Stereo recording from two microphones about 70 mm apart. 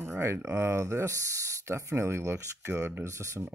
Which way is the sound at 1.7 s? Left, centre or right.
Right.